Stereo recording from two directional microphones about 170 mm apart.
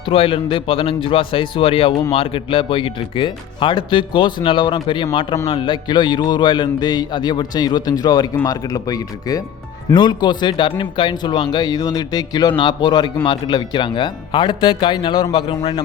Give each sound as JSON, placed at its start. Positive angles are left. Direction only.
{"t": 0.0, "sound": "a man's voice", "side_deg": 35}